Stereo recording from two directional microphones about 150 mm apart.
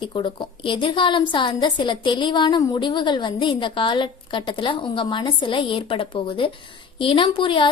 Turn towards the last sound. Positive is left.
turn(degrees=35)  # may be behind; listen again after turning